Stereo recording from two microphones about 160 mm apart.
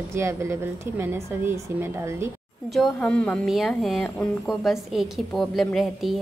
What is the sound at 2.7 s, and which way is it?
A woman's voice, 5° left (ahead or behind).